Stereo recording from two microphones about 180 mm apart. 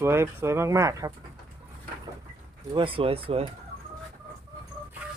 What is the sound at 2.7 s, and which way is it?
Speech, 30° right (ahead or behind).